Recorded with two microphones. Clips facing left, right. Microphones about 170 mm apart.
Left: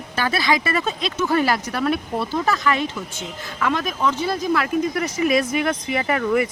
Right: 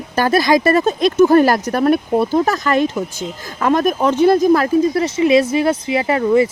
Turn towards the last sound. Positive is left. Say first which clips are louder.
# right 6 dB
turn(degrees=-25)  # may be behind; listen again after turning